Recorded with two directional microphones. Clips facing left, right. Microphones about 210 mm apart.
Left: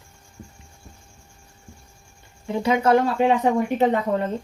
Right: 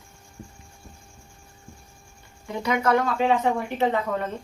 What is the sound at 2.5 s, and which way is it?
Speech, 25° left (ahead or behind).